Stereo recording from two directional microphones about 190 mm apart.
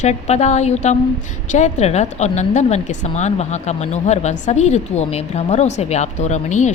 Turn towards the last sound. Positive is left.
turn(degrees=40)  # may be behind; listen again after turning